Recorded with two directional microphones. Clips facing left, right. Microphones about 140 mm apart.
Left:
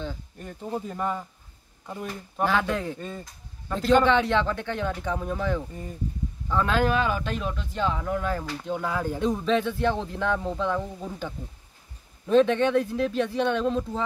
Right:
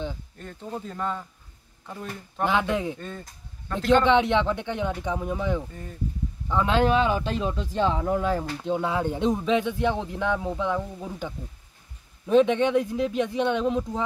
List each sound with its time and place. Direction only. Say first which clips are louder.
0.4 s speech: left 4 dB; 10° left (ahead or behind)
2.4 s speech: right 1 dB; 20° right (ahead or behind)
3.0 s speech: left 1 dB; 10° left (ahead or behind)
4.0 s speech: right 1 dB; 20° right (ahead or behind)
5.7 s speech: left 2 dB; 15° left (ahead or behind)
6.5 s speech: right 2 dB; 20° right (ahead or behind)